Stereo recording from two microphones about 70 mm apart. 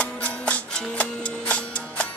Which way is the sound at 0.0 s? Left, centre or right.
Centre.